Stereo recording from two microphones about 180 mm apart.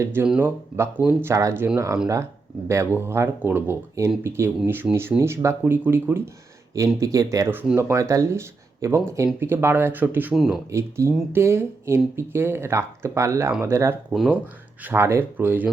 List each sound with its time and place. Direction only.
0.0 s speech: 10° right (ahead or behind)
10.7 s speech: 15° right (ahead or behind)
14.1 s speech: centre (ahead or behind)
14.8 s speech: 15° right (ahead or behind)